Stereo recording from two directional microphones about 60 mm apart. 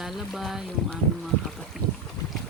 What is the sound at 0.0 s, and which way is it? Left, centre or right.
Speech, centre.